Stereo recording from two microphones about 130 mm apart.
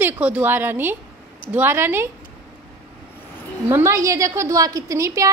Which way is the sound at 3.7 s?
20° right (ahead or behind).